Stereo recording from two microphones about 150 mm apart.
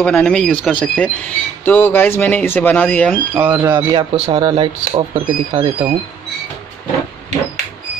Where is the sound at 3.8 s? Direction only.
30° right (ahead or behind).